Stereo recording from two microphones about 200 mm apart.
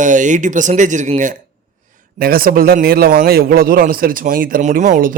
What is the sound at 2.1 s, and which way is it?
A man's voice, 45° right (ahead or behind).